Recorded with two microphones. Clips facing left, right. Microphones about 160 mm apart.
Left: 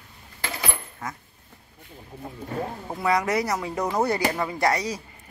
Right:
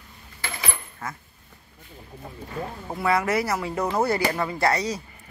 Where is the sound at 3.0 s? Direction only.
15° left (ahead or behind).